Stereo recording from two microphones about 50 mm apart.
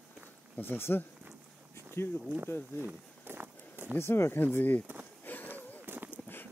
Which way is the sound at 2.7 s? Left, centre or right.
Right.